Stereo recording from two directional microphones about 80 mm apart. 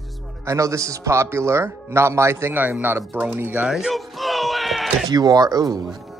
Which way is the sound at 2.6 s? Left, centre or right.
Right.